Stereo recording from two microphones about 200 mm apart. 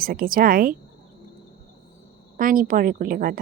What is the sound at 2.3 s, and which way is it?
A woman's voice, 45° right (ahead or behind).